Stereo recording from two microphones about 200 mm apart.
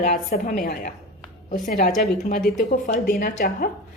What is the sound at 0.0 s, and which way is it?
A woman's voice, 45° left (ahead or behind).